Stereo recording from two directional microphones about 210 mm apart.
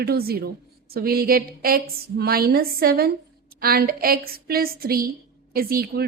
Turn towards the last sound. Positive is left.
turn(degrees=-45)  # may be behind; listen again after turning